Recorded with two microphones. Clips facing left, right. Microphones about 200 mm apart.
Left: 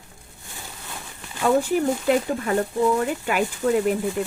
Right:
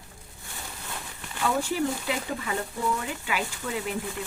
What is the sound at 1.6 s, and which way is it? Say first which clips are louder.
Speech: left 6 dB; 50° left (ahead or behind).